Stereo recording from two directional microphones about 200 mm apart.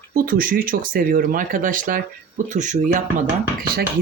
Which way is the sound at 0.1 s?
45° right (ahead or behind).